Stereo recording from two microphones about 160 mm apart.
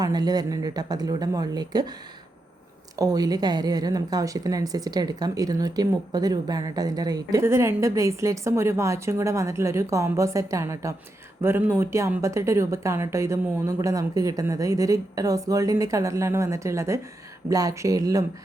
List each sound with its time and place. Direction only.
0.0 s a woman's voice: 25° right (ahead or behind)
2.9 s a woman's voice: 25° right (ahead or behind)